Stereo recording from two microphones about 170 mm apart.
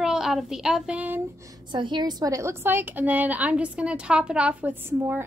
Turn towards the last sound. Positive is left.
turn(degrees=-15)  # may be behind; listen again after turning